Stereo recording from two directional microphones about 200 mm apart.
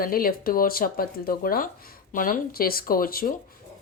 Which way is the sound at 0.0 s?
45° left (ahead or behind).